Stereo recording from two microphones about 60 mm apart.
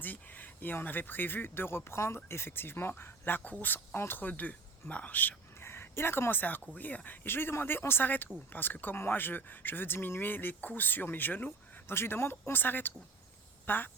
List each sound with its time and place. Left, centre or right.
0.0 s speech: left
4.3 s speech: left
5.5 s speech: left